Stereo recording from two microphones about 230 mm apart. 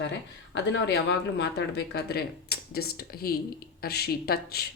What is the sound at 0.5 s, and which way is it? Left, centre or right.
Speech, left.